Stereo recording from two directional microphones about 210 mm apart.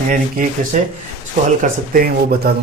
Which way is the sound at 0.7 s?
40° right (ahead or behind).